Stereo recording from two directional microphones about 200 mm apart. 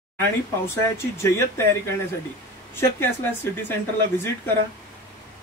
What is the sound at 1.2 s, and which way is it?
Speech, 15° left (ahead or behind).